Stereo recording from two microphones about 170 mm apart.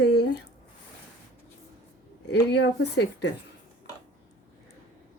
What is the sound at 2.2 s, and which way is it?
Speech, 90° left.